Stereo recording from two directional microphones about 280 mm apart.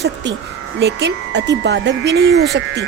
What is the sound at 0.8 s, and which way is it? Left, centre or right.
Speech, right.